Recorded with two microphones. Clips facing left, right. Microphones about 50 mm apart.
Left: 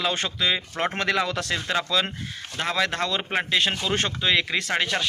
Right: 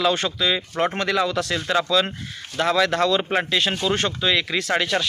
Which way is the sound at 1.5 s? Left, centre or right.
Left.